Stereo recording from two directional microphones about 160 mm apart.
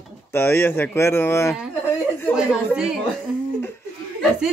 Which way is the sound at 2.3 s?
5° right (ahead or behind).